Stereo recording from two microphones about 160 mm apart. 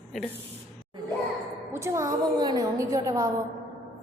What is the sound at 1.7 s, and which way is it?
A woman's voice, 15° right (ahead or behind).